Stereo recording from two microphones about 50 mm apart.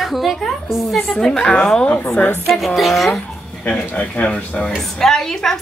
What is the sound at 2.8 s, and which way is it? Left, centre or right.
Speech, centre.